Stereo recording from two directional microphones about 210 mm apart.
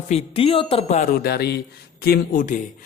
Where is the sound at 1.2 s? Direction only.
50° left (ahead or behind).